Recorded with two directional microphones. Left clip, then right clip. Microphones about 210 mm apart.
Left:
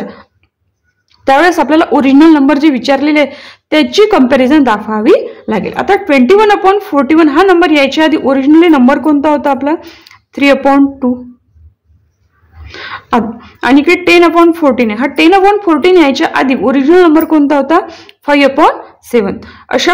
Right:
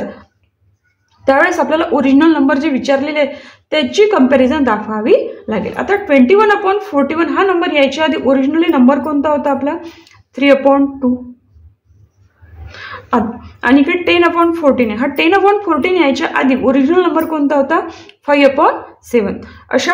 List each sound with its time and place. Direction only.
1.2 s a woman's voice: 40° left (ahead or behind)
12.6 s a woman's voice: 40° left (ahead or behind)